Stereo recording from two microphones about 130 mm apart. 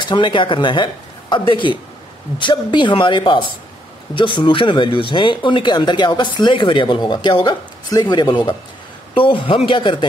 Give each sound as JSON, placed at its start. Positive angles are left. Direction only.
{"t": 0.0, "sound": "a man's voice", "side_deg": 40}